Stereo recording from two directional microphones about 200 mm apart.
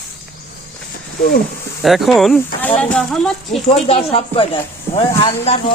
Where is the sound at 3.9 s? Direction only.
30° left (ahead or behind).